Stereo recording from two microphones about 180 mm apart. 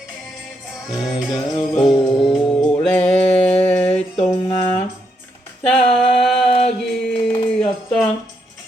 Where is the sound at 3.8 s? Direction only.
35° left (ahead or behind).